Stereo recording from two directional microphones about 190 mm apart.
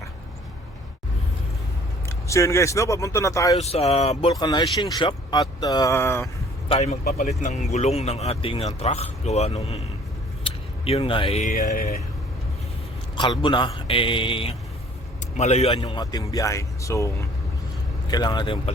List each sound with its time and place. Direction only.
2.0 s speech: 15° left (ahead or behind)
3.6 s speech: 35° left (ahead or behind)
4.4 s speech: 20° left (ahead or behind)
6.7 s speech: 35° left (ahead or behind)
7.0 s speech: 55° left (ahead or behind)
7.3 s speech: 35° left (ahead or behind)
13.1 s speech: 25° left (ahead or behind)
15.8 s speech: 20° left (ahead or behind)